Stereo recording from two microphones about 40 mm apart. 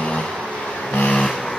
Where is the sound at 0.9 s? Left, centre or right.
Left.